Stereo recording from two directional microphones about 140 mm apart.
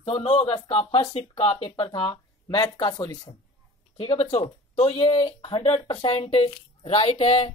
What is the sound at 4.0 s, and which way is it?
Speech, 45° left (ahead or behind).